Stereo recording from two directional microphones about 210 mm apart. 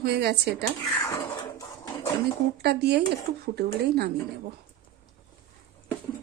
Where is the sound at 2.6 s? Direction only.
50° right (ahead or behind).